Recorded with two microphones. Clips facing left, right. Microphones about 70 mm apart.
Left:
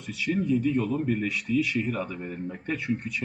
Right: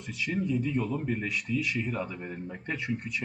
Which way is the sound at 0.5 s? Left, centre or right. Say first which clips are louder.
Left 5 dB; right.